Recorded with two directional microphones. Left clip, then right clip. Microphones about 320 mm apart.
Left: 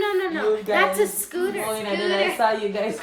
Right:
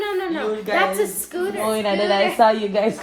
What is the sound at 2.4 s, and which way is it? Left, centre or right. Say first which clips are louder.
Speech: right 7 dB; centre.